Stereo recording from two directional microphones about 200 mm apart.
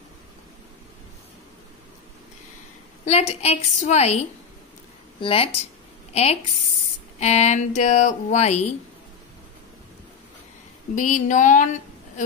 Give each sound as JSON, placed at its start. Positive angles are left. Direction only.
{"t": 3.1, "sound": "speech", "side_deg": 30}
{"t": 7.2, "sound": "speech", "side_deg": 35}
{"t": 11.0, "sound": "speech", "side_deg": 40}